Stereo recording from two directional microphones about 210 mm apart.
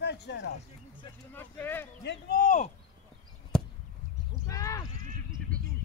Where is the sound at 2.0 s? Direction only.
50° left (ahead or behind).